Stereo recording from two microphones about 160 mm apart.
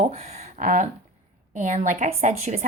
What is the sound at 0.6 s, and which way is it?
Speech, 55° right (ahead or behind).